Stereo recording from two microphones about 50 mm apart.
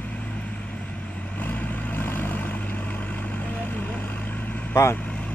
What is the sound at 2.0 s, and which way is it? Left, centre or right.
Vehicle, left.